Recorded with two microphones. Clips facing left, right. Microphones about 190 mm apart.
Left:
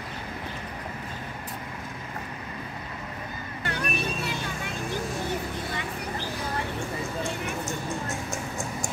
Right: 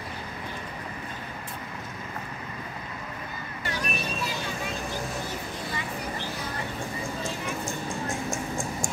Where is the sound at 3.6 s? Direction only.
60° left (ahead or behind).